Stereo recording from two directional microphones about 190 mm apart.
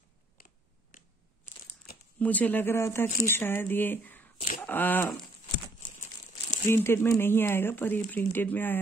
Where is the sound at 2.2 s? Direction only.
10° left (ahead or behind).